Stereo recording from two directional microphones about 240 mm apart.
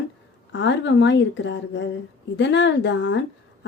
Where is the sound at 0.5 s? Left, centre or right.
Left.